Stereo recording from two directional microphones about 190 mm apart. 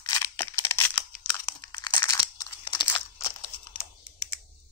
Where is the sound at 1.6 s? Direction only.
20° left (ahead or behind).